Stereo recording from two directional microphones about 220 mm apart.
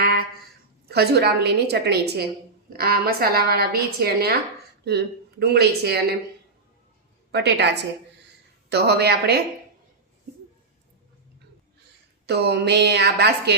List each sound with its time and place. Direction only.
0.0 s a sound: 45° right (ahead or behind)
0.9 s a woman's voice: 45° right (ahead or behind)
7.3 s a woman's voice: 50° right (ahead or behind)
12.2 s a woman's voice: 50° right (ahead or behind)